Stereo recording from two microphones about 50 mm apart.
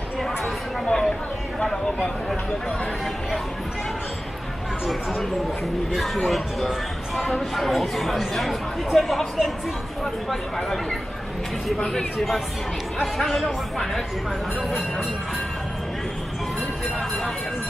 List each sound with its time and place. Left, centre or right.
0.8 s chatter: centre
1.6 s speech: centre
5.9 s speech: centre
11.7 s speech: centre
13.0 s speech: centre